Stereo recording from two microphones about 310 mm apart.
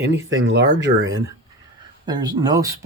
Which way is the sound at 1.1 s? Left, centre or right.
Centre.